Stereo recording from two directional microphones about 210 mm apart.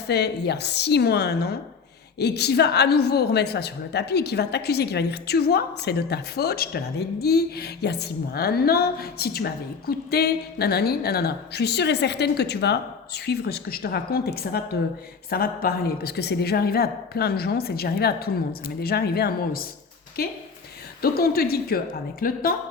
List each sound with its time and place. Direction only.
0.1 s a woman's voice: 50° left (ahead or behind)